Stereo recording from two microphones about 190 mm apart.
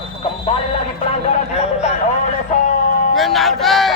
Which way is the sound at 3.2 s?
Centre (ahead or behind).